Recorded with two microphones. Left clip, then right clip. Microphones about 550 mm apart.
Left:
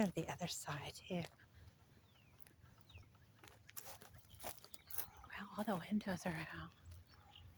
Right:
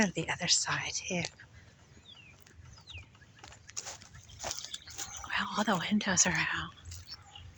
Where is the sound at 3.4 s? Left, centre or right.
Left.